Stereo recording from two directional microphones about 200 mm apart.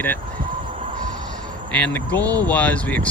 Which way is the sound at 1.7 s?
5° left (ahead or behind).